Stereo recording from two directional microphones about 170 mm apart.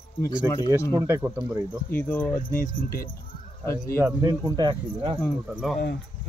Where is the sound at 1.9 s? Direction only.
10° left (ahead or behind).